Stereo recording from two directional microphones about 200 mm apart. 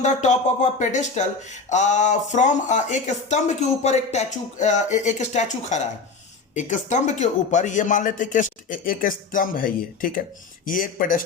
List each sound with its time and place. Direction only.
0.0 s speech: 35° left (ahead or behind)